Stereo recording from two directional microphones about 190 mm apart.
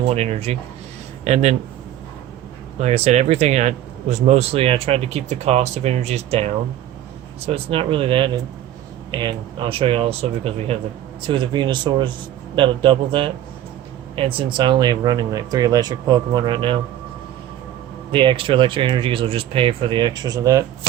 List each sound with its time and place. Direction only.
0.1 s speech: 35° right (ahead or behind)
2.7 s speech: 35° right (ahead or behind)
18.1 s speech: 25° right (ahead or behind)